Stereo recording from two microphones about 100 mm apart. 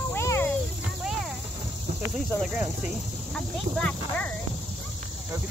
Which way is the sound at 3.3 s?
5° left (ahead or behind).